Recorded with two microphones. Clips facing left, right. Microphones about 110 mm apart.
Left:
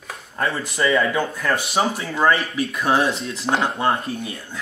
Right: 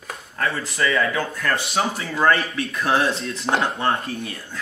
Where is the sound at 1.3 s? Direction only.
10° left (ahead or behind).